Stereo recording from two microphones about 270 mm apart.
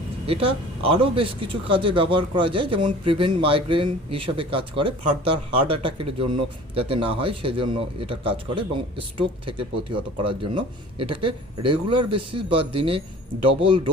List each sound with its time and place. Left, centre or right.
0.3 s speech: centre
6.7 s speech: right